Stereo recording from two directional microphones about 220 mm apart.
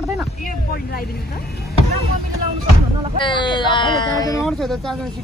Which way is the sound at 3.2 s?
20° left (ahead or behind).